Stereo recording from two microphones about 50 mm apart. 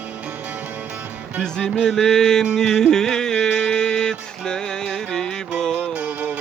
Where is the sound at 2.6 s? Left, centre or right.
Centre.